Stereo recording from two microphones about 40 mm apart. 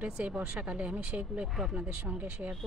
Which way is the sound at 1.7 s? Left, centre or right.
Right.